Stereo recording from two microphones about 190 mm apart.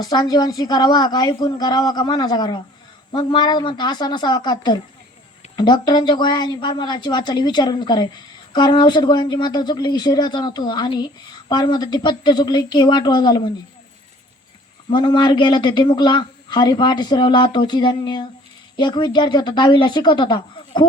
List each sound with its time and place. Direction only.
0.0 s a woman's voice: 20° left (ahead or behind)
14.8 s a woman's voice: 25° left (ahead or behind)